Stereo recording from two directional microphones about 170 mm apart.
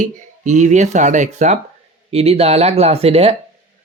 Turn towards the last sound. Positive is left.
turn(degrees=-35)  # may be behind; listen again after turning